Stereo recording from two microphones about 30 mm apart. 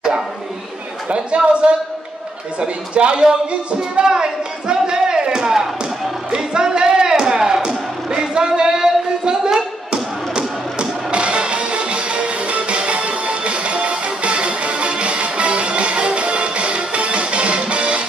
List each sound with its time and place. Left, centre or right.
1.0 s speech: right
4.0 s speech: right
6.3 s a sound: right
9.8 s music: right